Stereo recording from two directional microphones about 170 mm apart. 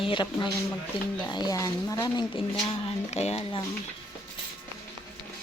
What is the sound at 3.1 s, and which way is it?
Speech, 40° left (ahead or behind).